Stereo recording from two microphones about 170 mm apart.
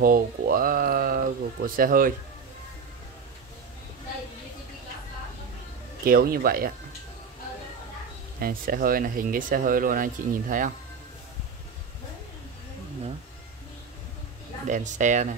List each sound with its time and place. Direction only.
0.0 s speech: 55° right (ahead or behind)
6.0 s speech: 60° right (ahead or behind)
8.4 s speech: 60° right (ahead or behind)
14.7 s speech: 45° right (ahead or behind)